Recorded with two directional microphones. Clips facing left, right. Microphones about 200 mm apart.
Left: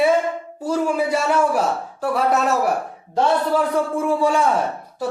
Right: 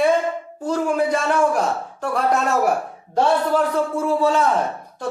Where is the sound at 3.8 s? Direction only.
15° left (ahead or behind).